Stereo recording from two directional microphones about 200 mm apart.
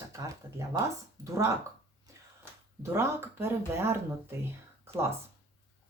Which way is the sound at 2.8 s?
10° right (ahead or behind).